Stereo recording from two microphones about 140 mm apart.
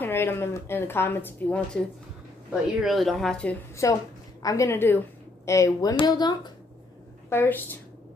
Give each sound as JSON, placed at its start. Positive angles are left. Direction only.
{"t": 0.0, "sound": "a woman's voice", "side_deg": 15}
{"t": 2.8, "sound": "speech", "side_deg": 0}
{"t": 3.8, "sound": "a woman's voice", "side_deg": 25}
{"t": 7.2, "sound": "a woman's voice", "side_deg": 15}